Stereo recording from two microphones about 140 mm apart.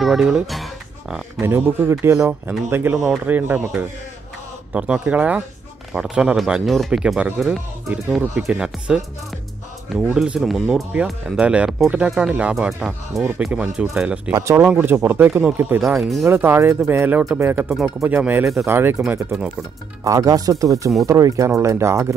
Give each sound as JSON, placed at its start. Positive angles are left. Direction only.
{"t": 0.0, "sound": "speech", "side_deg": -5}
{"t": 1.4, "sound": "speech", "side_deg": -15}
{"t": 14.3, "sound": "speech", "side_deg": -20}
{"t": 15.8, "sound": "speech", "side_deg": 0}
{"t": 16.3, "sound": "speech", "side_deg": -15}